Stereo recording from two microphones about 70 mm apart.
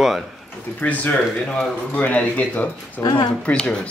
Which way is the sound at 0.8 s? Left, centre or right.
Left.